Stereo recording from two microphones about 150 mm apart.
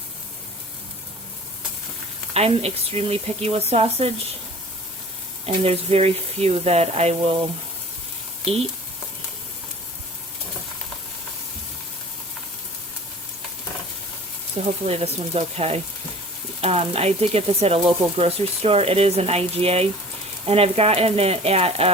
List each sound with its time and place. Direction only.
2.3 s speech: 45° right (ahead or behind)
5.5 s speech: 40° right (ahead or behind)
14.8 s speech: 45° right (ahead or behind)